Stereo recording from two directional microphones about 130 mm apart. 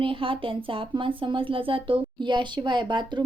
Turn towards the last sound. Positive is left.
turn(degrees=-35)  # may be behind; listen again after turning